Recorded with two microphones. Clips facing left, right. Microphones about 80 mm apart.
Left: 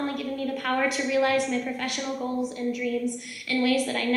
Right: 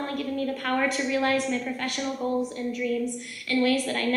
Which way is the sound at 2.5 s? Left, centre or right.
Right.